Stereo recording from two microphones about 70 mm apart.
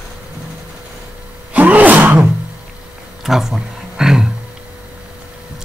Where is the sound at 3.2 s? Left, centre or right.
Centre.